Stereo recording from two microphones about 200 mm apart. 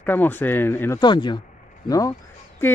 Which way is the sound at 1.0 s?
20° left (ahead or behind).